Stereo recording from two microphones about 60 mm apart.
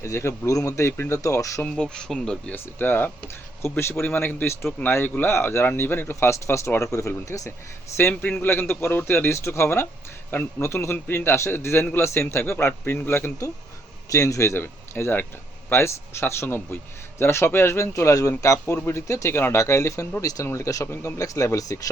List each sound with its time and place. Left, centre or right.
0.0 s speech: left
1.2 s speech: left
1.8 s speech: centre
2.5 s a man's voice: left
3.6 s a man's voice: left
4.0 s a man's voice: left
8.1 s a man's voice: left
14.1 s speech: left
14.6 s a man's voice: left
20.2 s speech: left
20.5 s speech: left
20.8 s a man's voice: left
21.2 s speech: left